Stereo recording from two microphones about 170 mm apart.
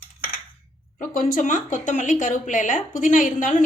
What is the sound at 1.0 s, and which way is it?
Speech, 50° left (ahead or behind).